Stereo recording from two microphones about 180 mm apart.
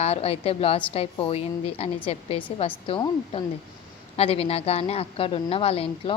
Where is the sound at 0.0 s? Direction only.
35° left (ahead or behind).